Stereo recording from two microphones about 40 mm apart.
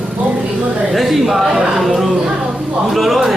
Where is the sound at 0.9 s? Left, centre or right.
Centre.